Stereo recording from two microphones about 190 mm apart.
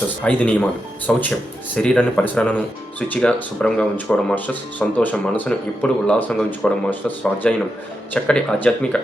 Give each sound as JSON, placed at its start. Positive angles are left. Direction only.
{"t": 0.2, "sound": "speech", "side_deg": 5}